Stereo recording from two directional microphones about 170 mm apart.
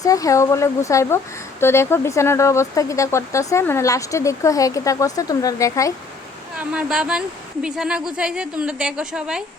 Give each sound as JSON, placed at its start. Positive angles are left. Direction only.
{"t": 0.0, "sound": "speech", "side_deg": 20}
{"t": 6.6, "sound": "speech", "side_deg": -5}